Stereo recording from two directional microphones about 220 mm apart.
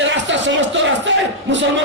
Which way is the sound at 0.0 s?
55° right (ahead or behind).